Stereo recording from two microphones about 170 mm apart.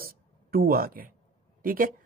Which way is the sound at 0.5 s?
60° right (ahead or behind).